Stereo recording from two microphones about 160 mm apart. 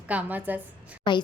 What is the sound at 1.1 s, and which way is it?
Speech, 30° left (ahead or behind).